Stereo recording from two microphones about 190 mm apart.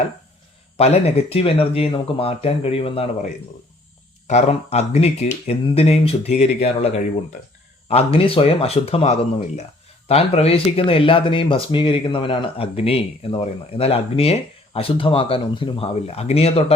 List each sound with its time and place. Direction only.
0.8 s speech: 35° left (ahead or behind)